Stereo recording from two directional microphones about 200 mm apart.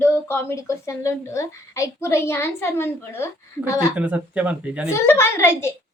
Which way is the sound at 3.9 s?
5° right (ahead or behind).